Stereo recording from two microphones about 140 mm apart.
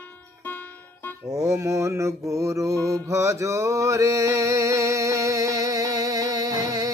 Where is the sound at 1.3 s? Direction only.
20° right (ahead or behind).